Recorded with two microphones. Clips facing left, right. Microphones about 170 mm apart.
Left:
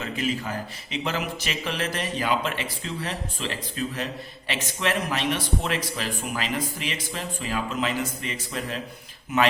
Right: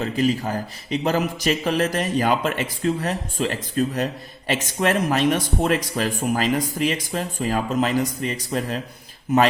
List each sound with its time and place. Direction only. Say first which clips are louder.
0.0 s speech: right 7 dB; 40° right (ahead or behind)